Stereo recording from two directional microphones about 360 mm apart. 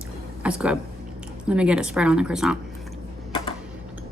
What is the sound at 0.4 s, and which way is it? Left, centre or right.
Speech, centre.